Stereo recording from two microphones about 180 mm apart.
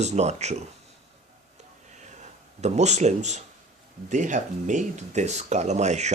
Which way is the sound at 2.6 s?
40° right (ahead or behind).